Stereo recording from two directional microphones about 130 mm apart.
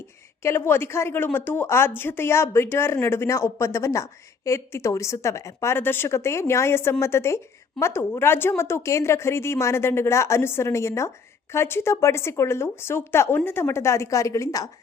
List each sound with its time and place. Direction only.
0.4 s a woman's voice: 15° left (ahead or behind)